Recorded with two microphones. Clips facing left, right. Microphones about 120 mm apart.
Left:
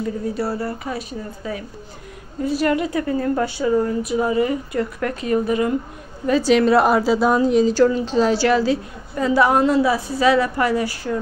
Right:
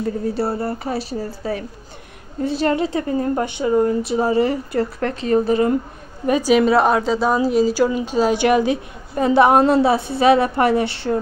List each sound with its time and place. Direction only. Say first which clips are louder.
0.3 s a woman's voice: right 2 dB; 25° right (ahead or behind)
6.2 s a woman's voice: even; 15° right (ahead or behind)
6.5 s a woman's voice: even; centre (ahead or behind); by 11.1 s 25° right (ahead or behind)